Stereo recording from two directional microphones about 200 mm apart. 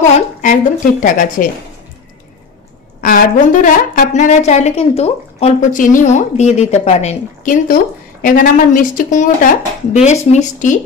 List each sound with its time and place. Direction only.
0.4 s a woman's voice: 40° left (ahead or behind)
3.0 s a woman's voice: 45° left (ahead or behind)